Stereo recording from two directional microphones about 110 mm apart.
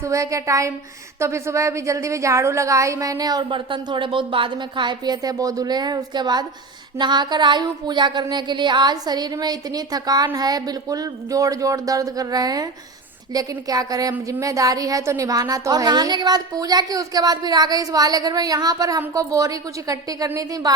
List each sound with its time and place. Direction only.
0.0 s speech: 30° right (ahead or behind)